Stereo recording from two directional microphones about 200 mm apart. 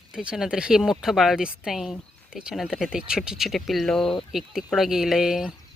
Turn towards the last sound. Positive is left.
turn(degrees=0)  # may be behind; listen again after turning